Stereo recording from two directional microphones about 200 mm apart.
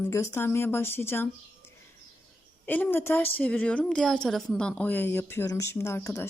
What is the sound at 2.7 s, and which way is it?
A woman's voice, 10° left (ahead or behind).